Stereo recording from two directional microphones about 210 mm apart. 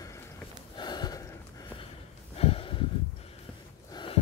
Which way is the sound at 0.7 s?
20° left (ahead or behind).